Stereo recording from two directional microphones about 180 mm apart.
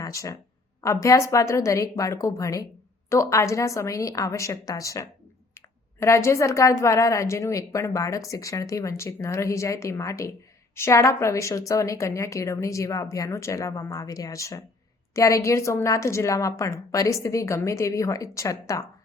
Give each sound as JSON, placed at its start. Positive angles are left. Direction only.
{"t": 0.0, "sound": "a woman's voice", "side_deg": 15}